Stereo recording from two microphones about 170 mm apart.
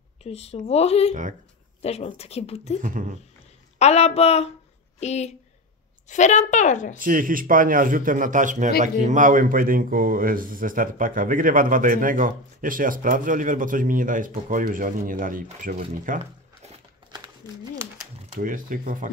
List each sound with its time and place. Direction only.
0.2 s speech: 35° left (ahead or behind)
2.8 s speech: 50° right (ahead or behind)
3.7 s a woman's voice: 40° left (ahead or behind)
7.0 s speech: 55° right (ahead or behind)
18.4 s speech: 55° right (ahead or behind)